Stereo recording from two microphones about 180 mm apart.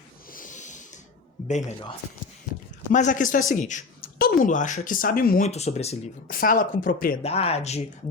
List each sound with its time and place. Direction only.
0.3 s snort: 50° left (ahead or behind)
1.5 s speech: 40° left (ahead or behind)
2.9 s speech: 45° left (ahead or behind)
5.4 s speech: 35° left (ahead or behind)
6.2 s speech: 50° left (ahead or behind)
7.2 s speech: 35° left (ahead or behind)